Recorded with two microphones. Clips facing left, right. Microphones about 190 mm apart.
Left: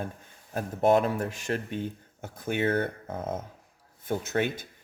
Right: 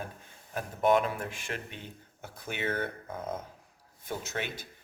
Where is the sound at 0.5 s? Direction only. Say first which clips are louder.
Left 3 dB; 35° left (ahead or behind).